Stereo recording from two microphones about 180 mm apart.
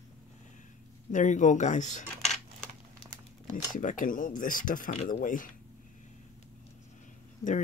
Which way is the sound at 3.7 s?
45° left (ahead or behind).